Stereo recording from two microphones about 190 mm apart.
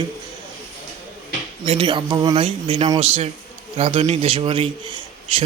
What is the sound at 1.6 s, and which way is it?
A man's voice, 30° right (ahead or behind).